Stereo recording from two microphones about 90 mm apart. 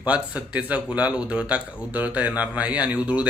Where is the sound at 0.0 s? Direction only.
15° right (ahead or behind).